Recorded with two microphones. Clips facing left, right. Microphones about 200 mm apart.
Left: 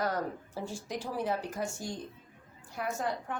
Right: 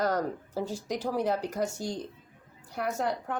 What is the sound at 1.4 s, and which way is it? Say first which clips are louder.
Speech: right 5 dB; 65° right (ahead or behind).